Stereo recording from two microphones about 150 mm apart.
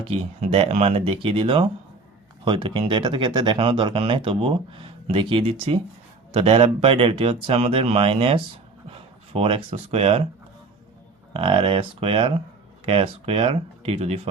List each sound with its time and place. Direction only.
0.0 s speech: 40° right (ahead or behind)
11.3 s speech: 35° right (ahead or behind)